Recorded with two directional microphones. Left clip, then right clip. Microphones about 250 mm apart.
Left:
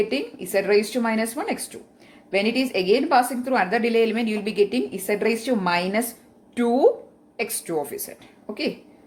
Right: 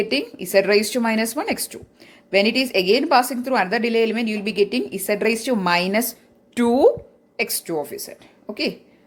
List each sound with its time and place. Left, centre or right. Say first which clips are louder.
0.0 s a woman's voice: right 2 dB; right